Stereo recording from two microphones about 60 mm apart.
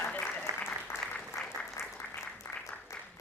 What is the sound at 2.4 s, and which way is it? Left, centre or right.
Applause, left.